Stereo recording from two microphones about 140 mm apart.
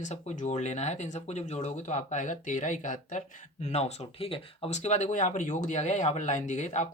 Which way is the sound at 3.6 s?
50° left (ahead or behind).